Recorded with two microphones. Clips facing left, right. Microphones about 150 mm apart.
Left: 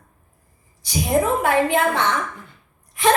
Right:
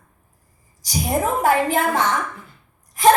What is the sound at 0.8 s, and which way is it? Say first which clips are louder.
A woman's voice: left 2 dB; 40° right (ahead or behind).